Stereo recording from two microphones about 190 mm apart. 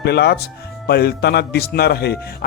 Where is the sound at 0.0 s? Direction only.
60° left (ahead or behind).